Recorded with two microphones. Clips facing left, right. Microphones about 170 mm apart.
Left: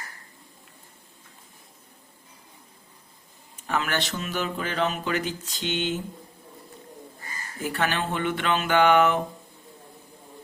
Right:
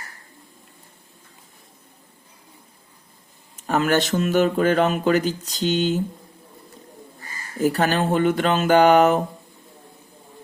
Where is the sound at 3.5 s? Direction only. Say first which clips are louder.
Right 8 dB; 45° right (ahead or behind).